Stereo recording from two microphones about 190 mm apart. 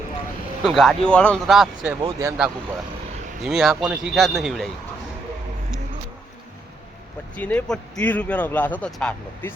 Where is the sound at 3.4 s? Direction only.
Centre (ahead or behind).